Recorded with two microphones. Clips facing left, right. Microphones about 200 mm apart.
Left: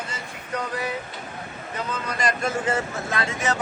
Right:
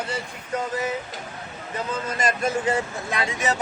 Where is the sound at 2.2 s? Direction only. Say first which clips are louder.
Right 1 dB; 20° right (ahead or behind).